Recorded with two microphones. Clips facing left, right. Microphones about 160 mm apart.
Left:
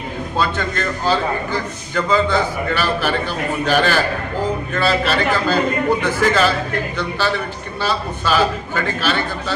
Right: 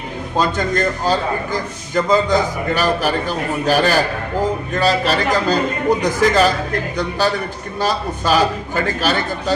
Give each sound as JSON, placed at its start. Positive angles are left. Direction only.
{"t": 0.3, "sound": "a man's voice", "side_deg": -40}
{"t": 7.8, "sound": "a man's voice", "side_deg": -40}